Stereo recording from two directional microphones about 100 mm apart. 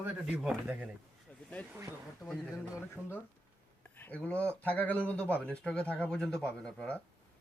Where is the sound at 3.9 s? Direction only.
20° left (ahead or behind).